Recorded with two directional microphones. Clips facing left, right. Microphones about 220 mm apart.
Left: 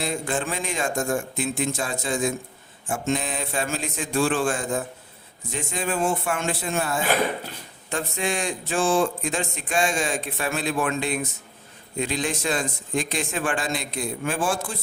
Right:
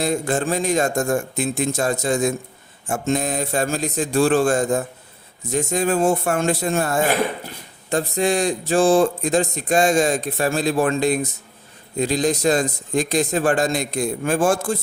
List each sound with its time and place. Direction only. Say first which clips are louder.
0.0 s speech: right 6 dB; 40° right (ahead or behind)